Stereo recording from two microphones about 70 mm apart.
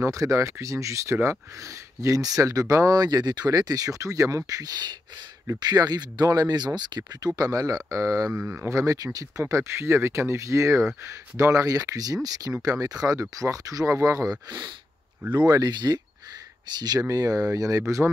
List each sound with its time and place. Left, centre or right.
0.0 s speech: right
3.4 s speech: right
4.5 s speech: right
7.3 s speech: right
9.4 s speech: right
15.2 s speech: right
15.5 s speech: right
17.1 s speech: right